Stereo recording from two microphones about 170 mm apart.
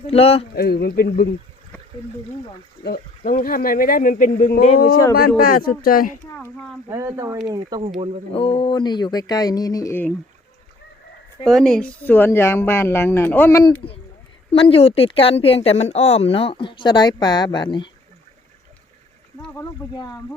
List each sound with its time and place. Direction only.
0.1 s a woman's voice: 35° left (ahead or behind)
0.5 s speech: 65° left (ahead or behind)
2.8 s speech: 65° left (ahead or behind); by 4.8 s 45° left (ahead or behind)
5.4 s speech: 60° left (ahead or behind)
6.3 s speech: 10° left (ahead or behind)
6.9 s speech: 15° right (ahead or behind)
8.3 s speech: 30° left (ahead or behind); by 10.1 s 15° left (ahead or behind)
11.4 s speech: 5° left (ahead or behind); by 13.8 s 20° left (ahead or behind)
14.5 s a woman's voice: 35° left (ahead or behind)
19.9 s speech: 25° left (ahead or behind)